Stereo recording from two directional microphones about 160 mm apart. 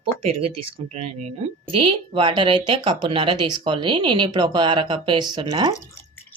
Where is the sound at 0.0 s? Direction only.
35° right (ahead or behind).